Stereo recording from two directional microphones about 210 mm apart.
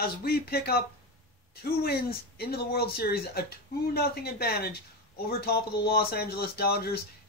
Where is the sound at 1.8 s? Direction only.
50° left (ahead or behind).